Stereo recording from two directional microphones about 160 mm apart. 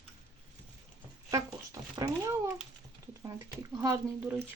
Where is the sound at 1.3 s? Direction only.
20° right (ahead or behind).